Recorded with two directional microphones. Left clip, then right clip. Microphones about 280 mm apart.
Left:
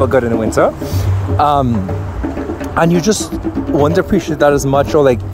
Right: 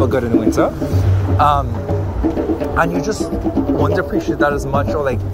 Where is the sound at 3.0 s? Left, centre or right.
Left.